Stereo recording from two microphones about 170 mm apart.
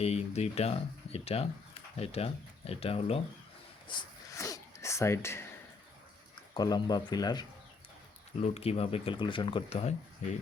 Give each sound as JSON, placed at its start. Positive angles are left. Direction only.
{"t": 0.0, "sound": "speech", "side_deg": 40}
{"t": 3.8, "sound": "a sound", "side_deg": 25}
{"t": 6.5, "sound": "speech", "side_deg": 25}
{"t": 8.4, "sound": "speech", "side_deg": 40}